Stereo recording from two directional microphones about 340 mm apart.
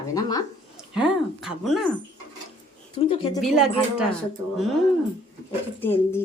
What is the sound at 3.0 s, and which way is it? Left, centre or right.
Speech, centre.